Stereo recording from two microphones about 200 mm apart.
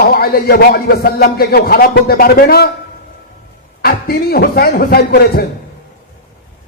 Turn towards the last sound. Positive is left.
turn(degrees=50)  # may be behind; listen again after turning